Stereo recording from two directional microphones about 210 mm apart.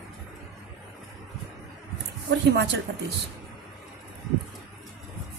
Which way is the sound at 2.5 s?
55° right (ahead or behind).